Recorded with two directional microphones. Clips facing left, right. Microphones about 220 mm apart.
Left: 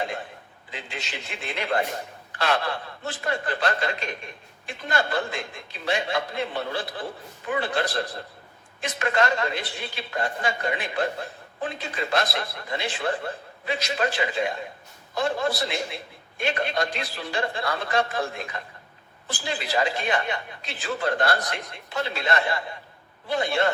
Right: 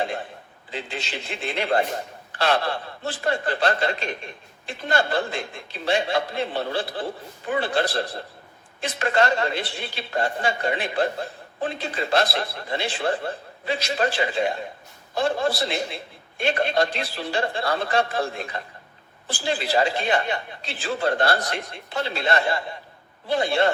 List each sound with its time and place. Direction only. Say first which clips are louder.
0.7 s speech: right 5 dB; 30° right (ahead or behind)